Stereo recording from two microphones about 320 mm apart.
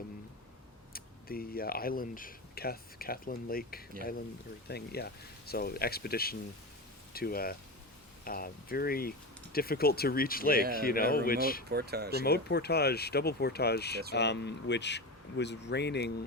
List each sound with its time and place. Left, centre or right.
0.9 s speech: left
11.7 s speech: right
12.2 s speech: left